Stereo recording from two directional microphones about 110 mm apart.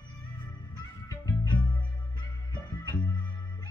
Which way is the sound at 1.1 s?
30° left (ahead or behind).